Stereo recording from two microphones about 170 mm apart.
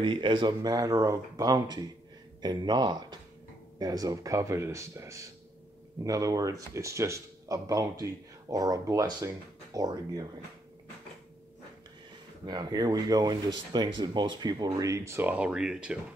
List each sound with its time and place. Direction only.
0.0 s speech: 30° right (ahead or behind)
12.4 s speech: 25° right (ahead or behind); by 16.0 s 5° right (ahead or behind)